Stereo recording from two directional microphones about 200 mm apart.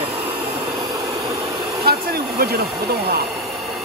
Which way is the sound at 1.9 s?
50° right (ahead or behind).